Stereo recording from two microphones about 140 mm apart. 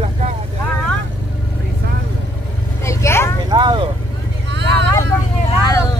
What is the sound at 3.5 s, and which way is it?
Vehicle, 35° right (ahead or behind).